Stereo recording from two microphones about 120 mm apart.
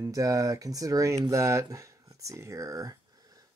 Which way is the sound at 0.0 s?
30° right (ahead or behind).